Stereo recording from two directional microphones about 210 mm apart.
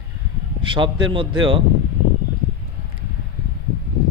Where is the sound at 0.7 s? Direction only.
20° right (ahead or behind).